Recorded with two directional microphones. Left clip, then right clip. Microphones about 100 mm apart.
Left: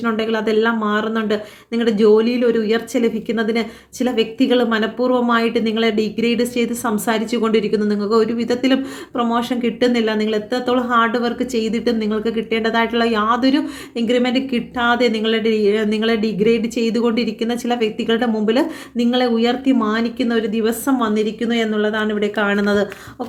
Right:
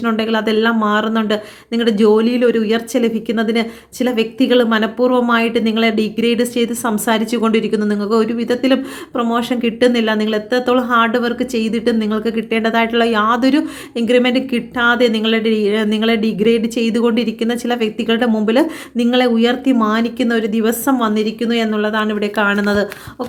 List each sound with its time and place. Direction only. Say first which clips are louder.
0.0 s speech: right 2 dB; 30° right (ahead or behind)